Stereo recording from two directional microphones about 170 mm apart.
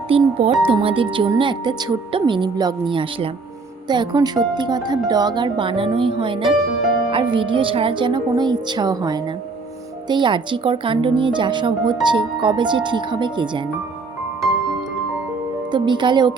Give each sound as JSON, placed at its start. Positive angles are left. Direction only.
{"t": 0.1, "sound": "speech", "side_deg": -35}
{"t": 15.7, "sound": "speech", "side_deg": -25}